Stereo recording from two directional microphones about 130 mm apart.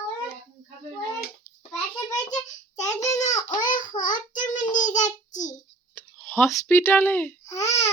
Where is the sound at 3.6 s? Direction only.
90° left.